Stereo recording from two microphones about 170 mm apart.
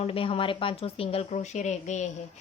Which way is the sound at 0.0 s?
35° left (ahead or behind).